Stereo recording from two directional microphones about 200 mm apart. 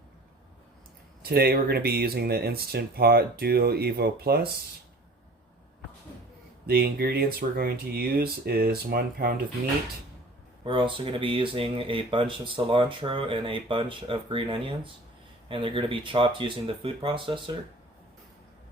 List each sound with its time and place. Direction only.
1.2 s speech: 50° right (ahead or behind)
6.7 s speech: 50° right (ahead or behind)
10.7 s speech: 25° right (ahead or behind)